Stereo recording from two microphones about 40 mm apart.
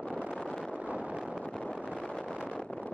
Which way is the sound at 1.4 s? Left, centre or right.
Left.